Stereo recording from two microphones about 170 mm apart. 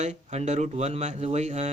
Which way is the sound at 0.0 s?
40° right (ahead or behind).